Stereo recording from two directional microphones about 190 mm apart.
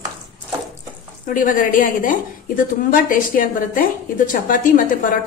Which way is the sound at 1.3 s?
45° left (ahead or behind).